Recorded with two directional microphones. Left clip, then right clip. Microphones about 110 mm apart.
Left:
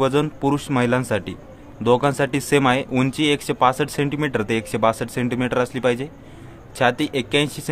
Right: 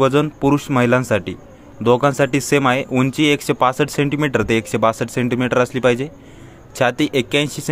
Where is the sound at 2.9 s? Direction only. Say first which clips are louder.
Right 3 dB; 25° right (ahead or behind).